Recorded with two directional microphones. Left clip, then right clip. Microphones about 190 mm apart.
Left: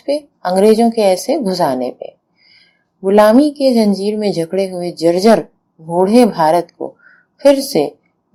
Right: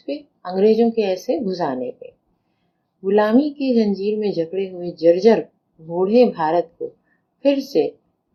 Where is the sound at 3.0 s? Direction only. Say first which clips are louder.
Left 8 dB; 30° left (ahead or behind).